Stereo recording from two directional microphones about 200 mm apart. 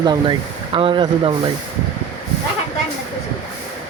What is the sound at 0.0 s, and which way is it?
Speech, 20° right (ahead or behind).